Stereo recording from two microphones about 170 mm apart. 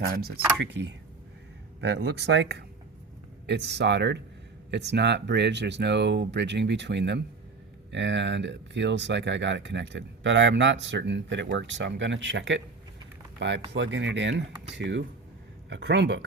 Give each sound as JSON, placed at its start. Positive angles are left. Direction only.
{"t": 0.0, "sound": "speech", "side_deg": -65}
{"t": 1.8, "sound": "speech", "side_deg": -90}
{"t": 13.7, "sound": "speech", "side_deg": -90}